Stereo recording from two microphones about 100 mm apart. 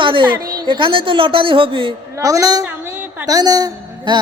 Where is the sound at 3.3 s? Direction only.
40° right (ahead or behind).